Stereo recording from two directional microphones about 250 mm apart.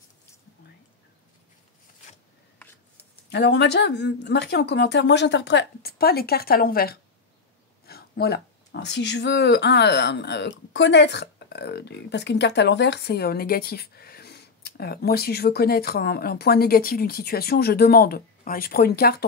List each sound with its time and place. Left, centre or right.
3.3 s speech: left